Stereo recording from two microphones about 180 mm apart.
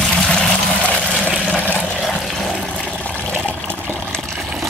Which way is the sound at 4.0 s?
5° left (ahead or behind).